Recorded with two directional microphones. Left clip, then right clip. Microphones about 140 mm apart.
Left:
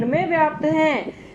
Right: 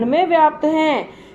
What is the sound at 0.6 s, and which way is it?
Speech, 40° right (ahead or behind).